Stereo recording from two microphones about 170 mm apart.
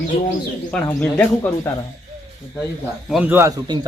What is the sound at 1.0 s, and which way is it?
Speech, 5° left (ahead or behind).